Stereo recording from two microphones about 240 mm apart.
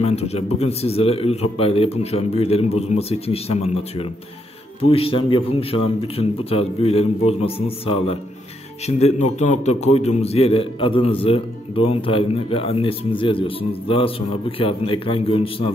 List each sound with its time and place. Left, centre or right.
0.0 s a man's voice: left
9.6 s a man's voice: left